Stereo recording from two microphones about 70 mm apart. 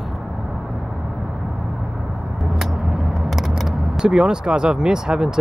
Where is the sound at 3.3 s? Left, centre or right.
Centre.